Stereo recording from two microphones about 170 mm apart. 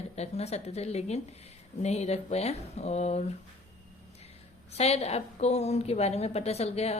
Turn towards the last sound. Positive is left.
turn(degrees=35)  # may be behind; listen again after turning